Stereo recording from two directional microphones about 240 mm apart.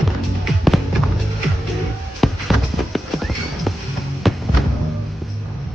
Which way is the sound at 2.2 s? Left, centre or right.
Centre.